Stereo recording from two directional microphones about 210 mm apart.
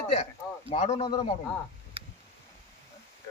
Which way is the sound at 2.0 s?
25° right (ahead or behind).